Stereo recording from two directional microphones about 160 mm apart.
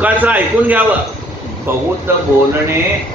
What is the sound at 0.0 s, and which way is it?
A man's voice, 10° right (ahead or behind).